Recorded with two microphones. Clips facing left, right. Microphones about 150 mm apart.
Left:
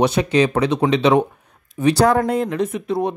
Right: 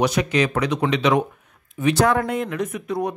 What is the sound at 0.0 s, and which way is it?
Speech, 30° left (ahead or behind).